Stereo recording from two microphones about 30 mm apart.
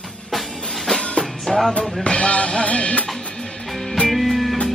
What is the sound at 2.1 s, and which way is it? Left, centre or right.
Music, left.